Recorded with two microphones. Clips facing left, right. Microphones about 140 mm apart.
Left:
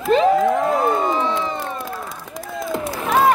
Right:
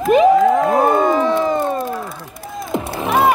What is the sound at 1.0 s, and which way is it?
Crowd, 50° right (ahead or behind).